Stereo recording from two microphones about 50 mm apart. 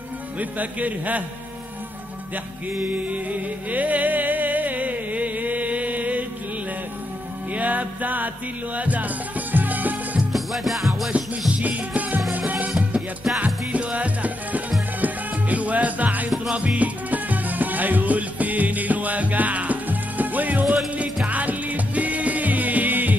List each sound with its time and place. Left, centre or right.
0.4 s speech: right
3.1 s music: right
7.5 s music: right
10.3 s music: centre
11.5 s music: right